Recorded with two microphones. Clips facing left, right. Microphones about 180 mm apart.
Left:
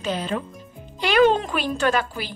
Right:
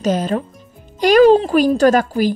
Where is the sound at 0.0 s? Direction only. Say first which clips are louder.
Right 8 dB; 40° right (ahead or behind).